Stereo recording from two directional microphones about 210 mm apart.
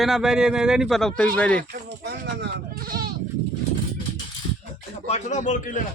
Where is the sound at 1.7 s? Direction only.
50° right (ahead or behind).